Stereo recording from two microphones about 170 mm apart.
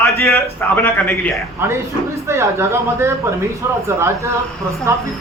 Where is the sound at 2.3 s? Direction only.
15° right (ahead or behind).